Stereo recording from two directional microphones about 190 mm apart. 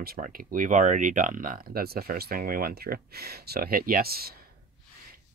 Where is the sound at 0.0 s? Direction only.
50° right (ahead or behind).